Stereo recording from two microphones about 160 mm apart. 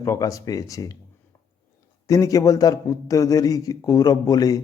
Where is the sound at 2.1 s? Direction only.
20° left (ahead or behind).